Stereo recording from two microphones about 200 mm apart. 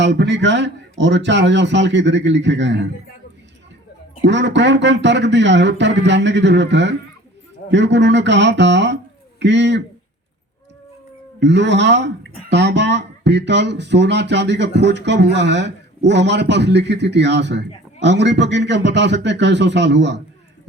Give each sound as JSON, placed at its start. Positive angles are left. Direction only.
{"t": 0.0, "sound": "speech", "side_deg": -60}
{"t": 4.2, "sound": "speech", "side_deg": -60}
{"t": 11.3, "sound": "speech", "side_deg": -60}